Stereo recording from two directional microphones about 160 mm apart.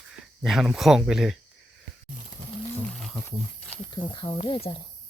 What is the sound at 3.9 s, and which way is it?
Speech, 30° left (ahead or behind).